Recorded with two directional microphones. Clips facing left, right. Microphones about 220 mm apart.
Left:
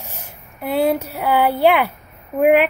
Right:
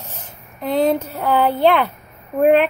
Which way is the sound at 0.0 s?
10° left (ahead or behind).